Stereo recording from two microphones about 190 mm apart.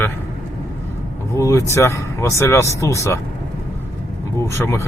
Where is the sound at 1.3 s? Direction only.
15° left (ahead or behind).